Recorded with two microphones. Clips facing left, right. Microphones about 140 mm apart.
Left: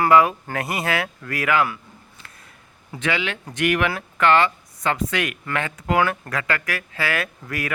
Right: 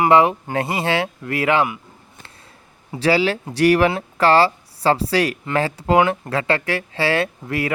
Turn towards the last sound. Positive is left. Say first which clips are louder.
# right 6 dB
turn(degrees=-25)  # may be behind; listen again after turning